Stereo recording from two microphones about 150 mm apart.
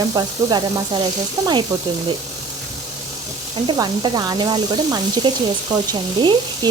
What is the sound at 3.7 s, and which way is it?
Speech, 30° right (ahead or behind).